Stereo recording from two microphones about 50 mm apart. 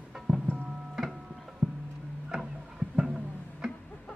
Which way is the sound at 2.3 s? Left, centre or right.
Centre.